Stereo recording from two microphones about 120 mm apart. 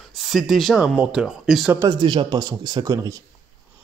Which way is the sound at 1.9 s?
40° right (ahead or behind).